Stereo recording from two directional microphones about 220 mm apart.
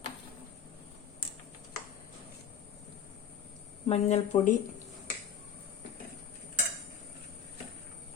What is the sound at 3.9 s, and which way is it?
Speech, 30° left (ahead or behind).